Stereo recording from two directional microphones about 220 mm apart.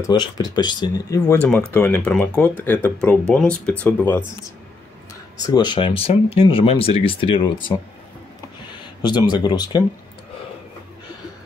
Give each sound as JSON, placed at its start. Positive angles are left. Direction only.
{"t": 0.0, "sound": "speech", "side_deg": 20}
{"t": 5.4, "sound": "speech", "side_deg": 20}
{"t": 9.0, "sound": "speech", "side_deg": 20}